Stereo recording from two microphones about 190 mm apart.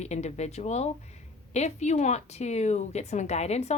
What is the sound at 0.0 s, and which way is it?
Speech, 35° left (ahead or behind).